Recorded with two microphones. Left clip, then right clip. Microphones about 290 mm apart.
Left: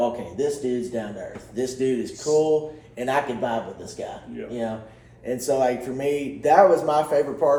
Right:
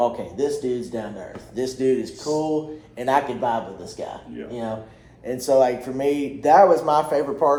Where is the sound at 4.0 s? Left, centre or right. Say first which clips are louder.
Right 1 dB; centre.